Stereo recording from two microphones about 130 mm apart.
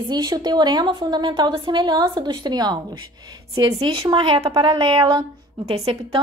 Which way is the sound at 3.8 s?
40° right (ahead or behind).